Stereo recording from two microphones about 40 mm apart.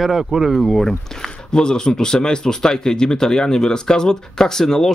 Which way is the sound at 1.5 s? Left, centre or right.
Centre.